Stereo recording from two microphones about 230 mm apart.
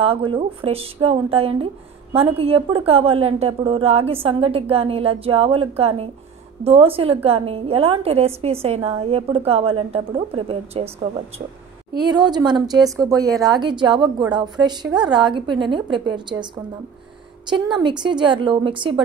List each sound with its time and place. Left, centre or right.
0.0 s a woman's voice: right
11.9 s a woman's voice: centre
17.7 s a woman's voice: centre